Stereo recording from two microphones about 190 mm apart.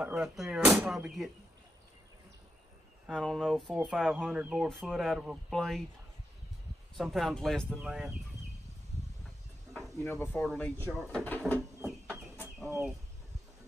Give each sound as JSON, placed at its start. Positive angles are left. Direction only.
{"t": 0.0, "sound": "speech", "side_deg": 0}
{"t": 3.1, "sound": "speech", "side_deg": 5}
{"t": 7.0, "sound": "speech", "side_deg": 0}
{"t": 10.0, "sound": "a sound", "side_deg": 15}
{"t": 10.3, "sound": "speech", "side_deg": 5}
{"t": 11.2, "sound": "a sound", "side_deg": 10}